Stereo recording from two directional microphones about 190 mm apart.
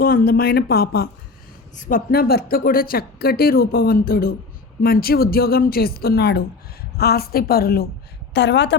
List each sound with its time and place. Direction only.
0.0 s speech: 50° left (ahead or behind)
1.7 s a woman's voice: 40° left (ahead or behind)
2.0 s speech: 55° left (ahead or behind)
8.3 s a woman's voice: 65° left (ahead or behind)